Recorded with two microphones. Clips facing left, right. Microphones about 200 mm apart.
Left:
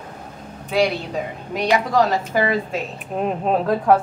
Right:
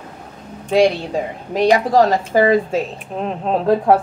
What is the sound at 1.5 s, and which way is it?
Speech, 35° right (ahead or behind).